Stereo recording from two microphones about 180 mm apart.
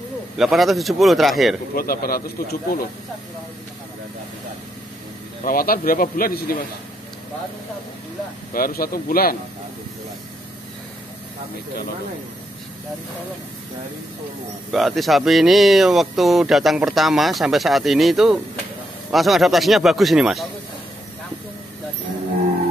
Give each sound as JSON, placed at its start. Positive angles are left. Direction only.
{"t": 0.4, "sound": "speech", "side_deg": 0}
{"t": 1.8, "sound": "speech", "side_deg": 55}
{"t": 5.4, "sound": "speech", "side_deg": 50}
{"t": 8.5, "sound": "speech", "side_deg": 55}
{"t": 14.7, "sound": "speech", "side_deg": 0}